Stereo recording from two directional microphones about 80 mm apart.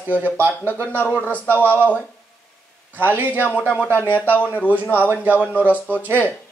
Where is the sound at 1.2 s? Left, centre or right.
Left.